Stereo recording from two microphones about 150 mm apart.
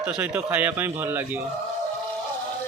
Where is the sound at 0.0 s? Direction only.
10° right (ahead or behind).